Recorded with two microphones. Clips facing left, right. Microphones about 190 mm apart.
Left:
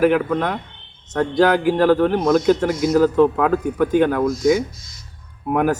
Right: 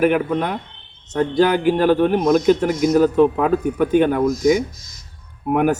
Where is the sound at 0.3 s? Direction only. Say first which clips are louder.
Even; 20° right (ahead or behind).